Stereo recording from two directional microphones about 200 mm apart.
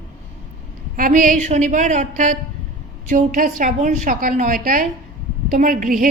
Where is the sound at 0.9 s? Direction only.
40° right (ahead or behind).